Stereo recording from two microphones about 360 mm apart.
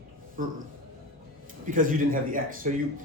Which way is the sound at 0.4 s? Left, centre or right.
Right.